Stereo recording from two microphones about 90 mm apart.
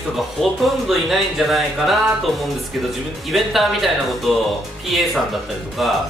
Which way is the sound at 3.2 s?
Centre (ahead or behind).